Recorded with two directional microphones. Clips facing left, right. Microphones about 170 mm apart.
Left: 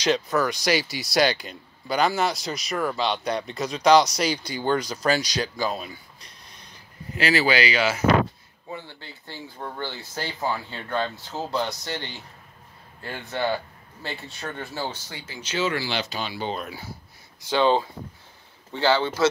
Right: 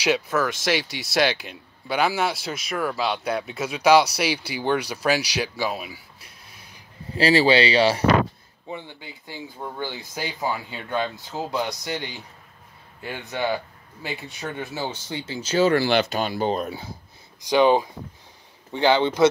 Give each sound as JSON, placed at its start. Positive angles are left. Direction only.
{"t": 0.0, "sound": "speech", "side_deg": -5}
{"t": 7.1, "sound": "speech", "side_deg": -30}
{"t": 8.6, "sound": "speech", "side_deg": -15}
{"t": 17.4, "sound": "speech", "side_deg": -15}